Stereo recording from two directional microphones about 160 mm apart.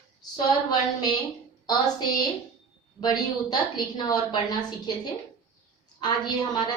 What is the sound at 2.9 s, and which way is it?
A woman's voice, 25° left (ahead or behind).